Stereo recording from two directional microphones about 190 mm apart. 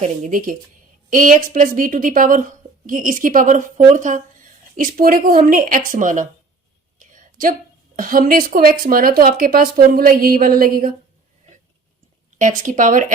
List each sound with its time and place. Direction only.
0.0 s a woman's voice: 45° right (ahead or behind)
7.0 s a sound: 45° right (ahead or behind)
7.9 s a woman's voice: 45° right (ahead or behind)
12.4 s a woman's voice: 45° right (ahead or behind)